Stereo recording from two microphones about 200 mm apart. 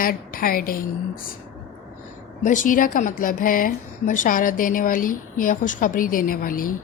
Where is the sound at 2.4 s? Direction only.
40° left (ahead or behind).